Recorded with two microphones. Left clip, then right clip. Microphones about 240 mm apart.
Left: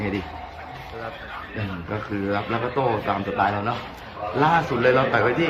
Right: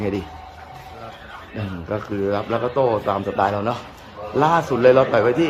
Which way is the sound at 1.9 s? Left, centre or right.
Right.